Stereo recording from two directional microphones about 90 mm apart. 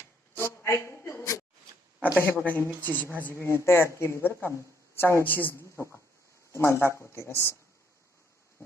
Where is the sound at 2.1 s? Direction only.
20° left (ahead or behind).